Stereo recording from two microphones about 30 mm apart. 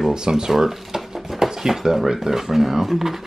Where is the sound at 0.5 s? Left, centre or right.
Centre.